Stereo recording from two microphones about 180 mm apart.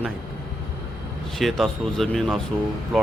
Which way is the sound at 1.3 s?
Centre (ahead or behind).